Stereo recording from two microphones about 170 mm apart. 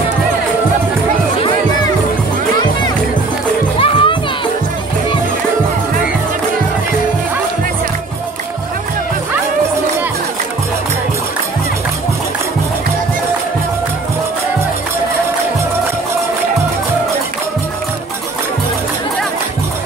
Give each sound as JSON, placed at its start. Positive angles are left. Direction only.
{"t": 3.8, "sound": "music", "side_deg": 30}